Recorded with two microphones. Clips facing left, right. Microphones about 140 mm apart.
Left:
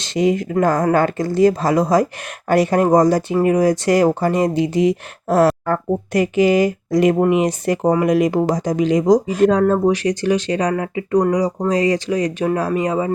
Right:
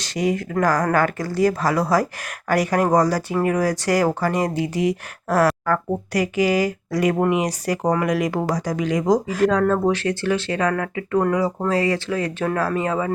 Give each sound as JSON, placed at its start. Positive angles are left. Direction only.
{"t": 0.0, "sound": "speech", "side_deg": 25}